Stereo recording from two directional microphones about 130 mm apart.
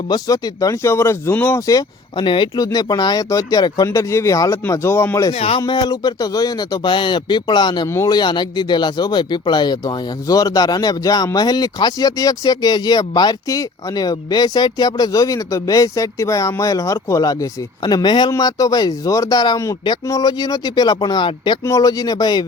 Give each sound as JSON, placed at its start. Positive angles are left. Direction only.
{"t": 0.1, "sound": "speech", "side_deg": 30}
{"t": 2.2, "sound": "speech", "side_deg": 40}
{"t": 3.8, "sound": "speech", "side_deg": 20}
{"t": 5.3, "sound": "speech", "side_deg": 50}
{"t": 5.5, "sound": "speech", "side_deg": 35}
{"t": 7.9, "sound": "speech", "side_deg": 20}
{"t": 8.1, "sound": "speech", "side_deg": 35}
{"t": 21.6, "sound": "speech", "side_deg": 25}